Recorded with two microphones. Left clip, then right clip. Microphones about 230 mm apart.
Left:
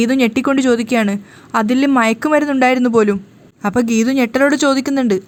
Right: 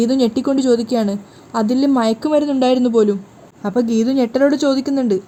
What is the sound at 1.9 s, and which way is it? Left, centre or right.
Speech, left.